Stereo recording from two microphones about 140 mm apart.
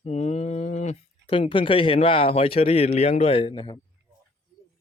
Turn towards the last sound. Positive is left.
turn(degrees=35)  # may be behind; listen again after turning